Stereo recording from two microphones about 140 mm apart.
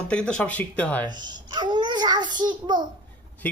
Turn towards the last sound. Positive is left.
turn(degrees=10)  # may be behind; listen again after turning